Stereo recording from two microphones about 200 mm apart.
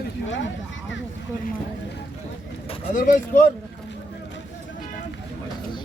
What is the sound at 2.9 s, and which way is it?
Speech, 40° left (ahead or behind).